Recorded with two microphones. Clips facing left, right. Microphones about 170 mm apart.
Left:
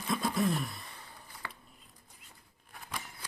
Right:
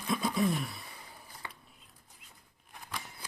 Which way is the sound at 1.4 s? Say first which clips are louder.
Left 2 dB; 20° right (ahead or behind).